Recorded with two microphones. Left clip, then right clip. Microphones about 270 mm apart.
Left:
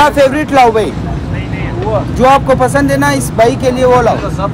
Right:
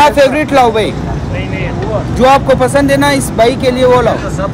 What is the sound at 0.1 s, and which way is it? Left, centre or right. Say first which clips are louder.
Speech: right 1 dB; centre.